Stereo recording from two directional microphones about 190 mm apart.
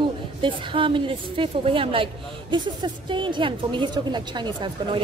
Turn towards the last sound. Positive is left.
turn(degrees=-25)  # may be behind; listen again after turning